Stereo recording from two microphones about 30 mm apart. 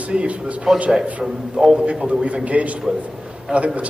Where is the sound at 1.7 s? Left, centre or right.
Right.